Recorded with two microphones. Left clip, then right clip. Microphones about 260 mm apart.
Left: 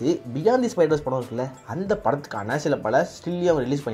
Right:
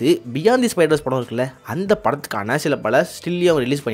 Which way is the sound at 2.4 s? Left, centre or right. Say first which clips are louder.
Right 4 dB; right.